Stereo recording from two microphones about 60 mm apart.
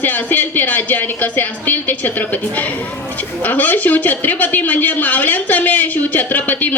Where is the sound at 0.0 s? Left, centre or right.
Left.